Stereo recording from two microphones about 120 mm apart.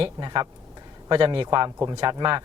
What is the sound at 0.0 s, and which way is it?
Speech, 35° right (ahead or behind).